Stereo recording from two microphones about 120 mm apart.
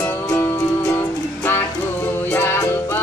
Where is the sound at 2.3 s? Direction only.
20° left (ahead or behind).